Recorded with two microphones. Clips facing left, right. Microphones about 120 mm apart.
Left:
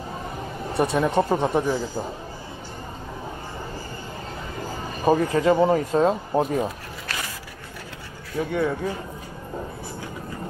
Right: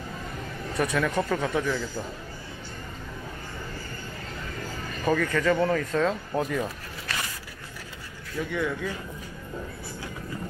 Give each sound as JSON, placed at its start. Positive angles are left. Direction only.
{"t": 0.8, "sound": "speech", "side_deg": 30}
{"t": 4.6, "sound": "speech", "side_deg": 25}
{"t": 8.5, "sound": "speech", "side_deg": 35}